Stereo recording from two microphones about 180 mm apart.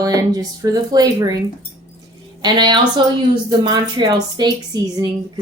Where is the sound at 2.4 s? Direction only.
25° right (ahead or behind).